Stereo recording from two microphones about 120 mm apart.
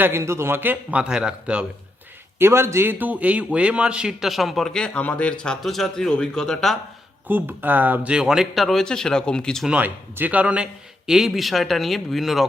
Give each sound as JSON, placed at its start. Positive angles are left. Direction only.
{"t": 0.0, "sound": "speech", "side_deg": -20}
{"t": 2.4, "sound": "a man's voice", "side_deg": -20}
{"t": 7.3, "sound": "a man's voice", "side_deg": -15}
{"t": 9.6, "sound": "a man's voice", "side_deg": -10}